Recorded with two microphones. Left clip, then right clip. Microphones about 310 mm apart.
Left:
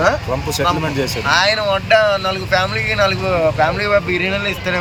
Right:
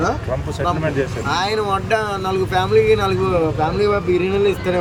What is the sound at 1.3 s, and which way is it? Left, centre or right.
Speech, centre.